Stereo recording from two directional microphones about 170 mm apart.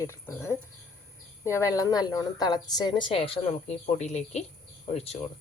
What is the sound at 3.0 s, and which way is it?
Speech, 35° left (ahead or behind).